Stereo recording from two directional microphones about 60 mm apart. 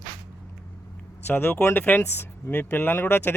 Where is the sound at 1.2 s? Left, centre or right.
Left.